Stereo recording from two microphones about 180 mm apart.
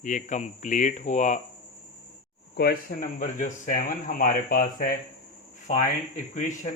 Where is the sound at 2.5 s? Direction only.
55° left (ahead or behind).